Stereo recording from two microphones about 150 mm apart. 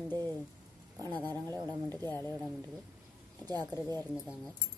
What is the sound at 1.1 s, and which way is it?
Speech, 15° left (ahead or behind).